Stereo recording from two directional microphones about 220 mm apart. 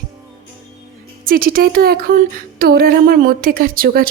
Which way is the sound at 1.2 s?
40° right (ahead or behind).